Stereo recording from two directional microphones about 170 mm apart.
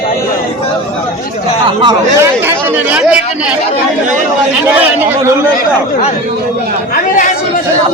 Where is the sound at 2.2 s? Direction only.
15° right (ahead or behind).